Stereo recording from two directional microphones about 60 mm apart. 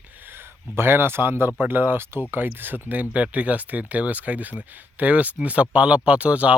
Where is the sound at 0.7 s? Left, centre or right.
Right.